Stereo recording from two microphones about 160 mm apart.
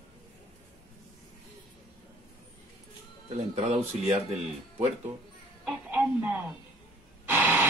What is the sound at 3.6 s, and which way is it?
Speech, 45° right (ahead or behind).